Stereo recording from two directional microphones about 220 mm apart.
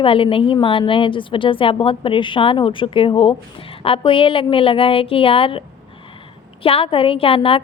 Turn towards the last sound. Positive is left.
turn(degrees=25)  # may be behind; listen again after turning